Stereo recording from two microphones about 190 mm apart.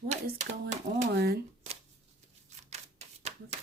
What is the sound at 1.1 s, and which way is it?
Speech, 55° right (ahead or behind).